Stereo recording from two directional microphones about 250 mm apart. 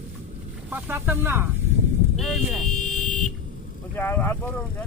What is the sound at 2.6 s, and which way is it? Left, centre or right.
Vehicle, left.